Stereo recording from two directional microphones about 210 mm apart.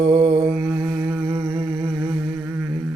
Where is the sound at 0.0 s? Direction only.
20° right (ahead or behind).